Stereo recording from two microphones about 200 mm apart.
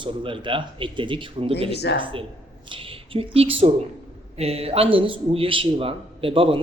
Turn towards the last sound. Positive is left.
turn(degrees=-25)  # may be behind; listen again after turning